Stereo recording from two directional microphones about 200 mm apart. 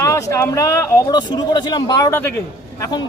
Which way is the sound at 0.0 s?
15° left (ahead or behind).